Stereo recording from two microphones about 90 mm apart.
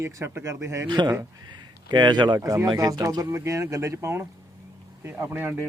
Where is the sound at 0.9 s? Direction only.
55° right (ahead or behind).